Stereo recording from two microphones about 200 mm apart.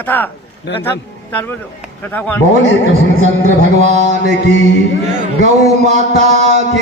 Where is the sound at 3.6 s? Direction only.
35° right (ahead or behind).